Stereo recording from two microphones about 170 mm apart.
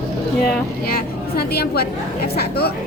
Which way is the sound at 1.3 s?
65° left (ahead or behind).